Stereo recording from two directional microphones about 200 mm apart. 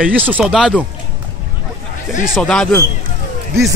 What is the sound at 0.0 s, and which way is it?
Speech, 10° right (ahead or behind).